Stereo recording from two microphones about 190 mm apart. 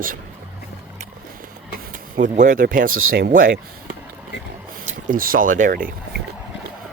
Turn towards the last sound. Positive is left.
turn(degrees=-50)  # may be behind; listen again after turning